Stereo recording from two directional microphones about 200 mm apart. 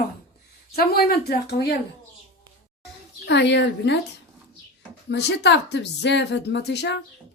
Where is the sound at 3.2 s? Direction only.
60° left (ahead or behind).